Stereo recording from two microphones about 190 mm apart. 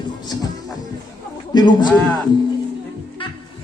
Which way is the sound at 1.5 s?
25° left (ahead or behind).